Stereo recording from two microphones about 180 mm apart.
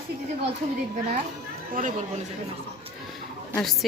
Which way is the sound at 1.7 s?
45° right (ahead or behind).